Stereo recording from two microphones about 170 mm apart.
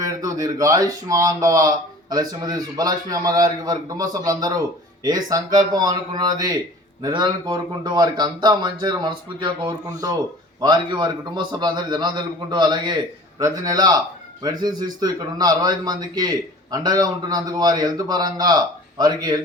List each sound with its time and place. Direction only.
0.0 s speech: 20° right (ahead or behind)